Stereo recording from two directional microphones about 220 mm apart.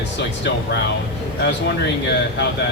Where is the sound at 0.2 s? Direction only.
55° left (ahead or behind).